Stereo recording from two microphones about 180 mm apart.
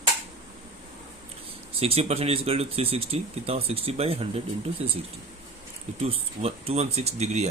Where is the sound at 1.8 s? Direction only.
35° right (ahead or behind).